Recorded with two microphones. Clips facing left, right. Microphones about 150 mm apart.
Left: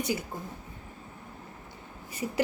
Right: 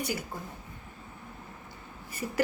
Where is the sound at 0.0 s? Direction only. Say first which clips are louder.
Left 3 dB; 20° left (ahead or behind).